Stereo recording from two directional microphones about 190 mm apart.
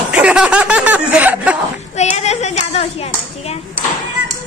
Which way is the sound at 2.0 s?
35° left (ahead or behind).